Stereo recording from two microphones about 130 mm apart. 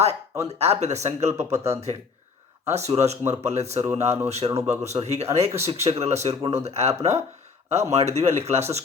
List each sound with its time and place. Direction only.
0.4 s speech: 55° right (ahead or behind)